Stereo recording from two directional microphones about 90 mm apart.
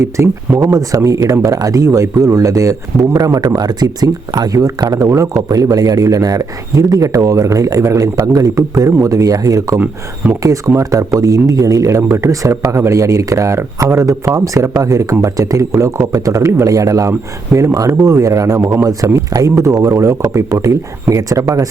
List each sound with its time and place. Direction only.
0.0 s speech: 35° right (ahead or behind)